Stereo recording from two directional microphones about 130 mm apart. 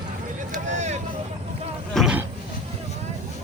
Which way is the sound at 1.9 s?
Centre (ahead or behind).